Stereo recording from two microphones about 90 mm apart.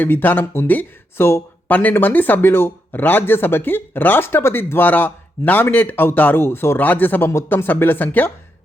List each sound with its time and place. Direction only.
0.0 s speech: 20° left (ahead or behind)